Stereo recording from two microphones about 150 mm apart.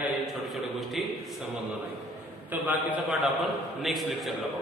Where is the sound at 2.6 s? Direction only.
10° right (ahead or behind).